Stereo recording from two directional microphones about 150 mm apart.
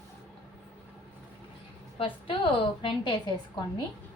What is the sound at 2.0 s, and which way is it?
A woman's voice, 35° left (ahead or behind).